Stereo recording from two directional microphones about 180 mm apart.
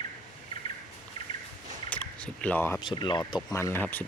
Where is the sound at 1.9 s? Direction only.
5° left (ahead or behind).